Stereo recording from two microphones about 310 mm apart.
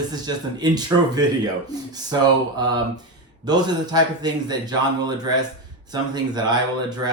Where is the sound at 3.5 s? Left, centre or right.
Centre.